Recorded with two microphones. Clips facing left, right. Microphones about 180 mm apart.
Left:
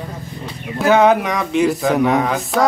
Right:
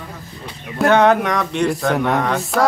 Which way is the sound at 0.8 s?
Centre (ahead or behind).